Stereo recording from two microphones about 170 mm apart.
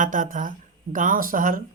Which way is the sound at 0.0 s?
50° right (ahead or behind).